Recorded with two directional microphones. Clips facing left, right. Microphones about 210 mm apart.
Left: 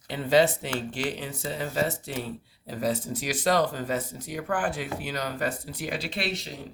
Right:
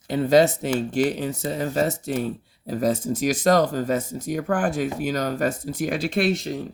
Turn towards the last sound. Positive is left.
turn(degrees=-50)  # may be behind; listen again after turning